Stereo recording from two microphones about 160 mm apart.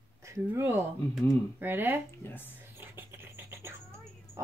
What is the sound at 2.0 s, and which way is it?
Speech, 15° left (ahead or behind).